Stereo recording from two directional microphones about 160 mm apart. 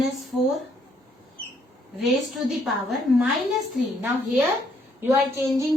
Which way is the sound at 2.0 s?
Centre (ahead or behind).